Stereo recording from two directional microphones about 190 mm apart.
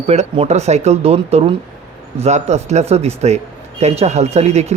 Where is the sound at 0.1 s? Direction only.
35° right (ahead or behind).